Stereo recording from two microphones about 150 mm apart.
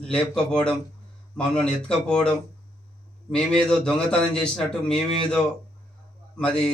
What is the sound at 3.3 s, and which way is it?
A man's voice, 5° left (ahead or behind).